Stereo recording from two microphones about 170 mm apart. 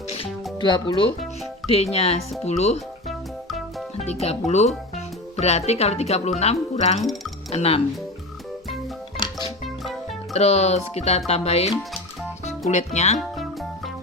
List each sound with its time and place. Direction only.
0.1 s music: 30° left (ahead or behind)
1.7 s a woman's voice: 35° left (ahead or behind)
3.9 s a woman's voice: 40° left (ahead or behind)
9.1 s music: 25° left (ahead or behind)
10.3 s a woman's voice: 40° left (ahead or behind)
13.1 s music: centre (ahead or behind)